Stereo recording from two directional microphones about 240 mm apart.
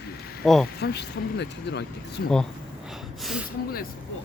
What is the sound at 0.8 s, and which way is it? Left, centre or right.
Speech, left.